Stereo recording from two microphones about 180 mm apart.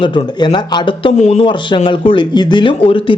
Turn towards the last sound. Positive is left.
turn(degrees=30)  # may be behind; listen again after turning